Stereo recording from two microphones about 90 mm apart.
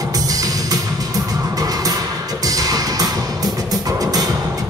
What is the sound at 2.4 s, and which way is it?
Music, 40° right (ahead or behind).